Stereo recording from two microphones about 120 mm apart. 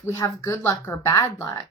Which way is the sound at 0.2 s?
25° left (ahead or behind).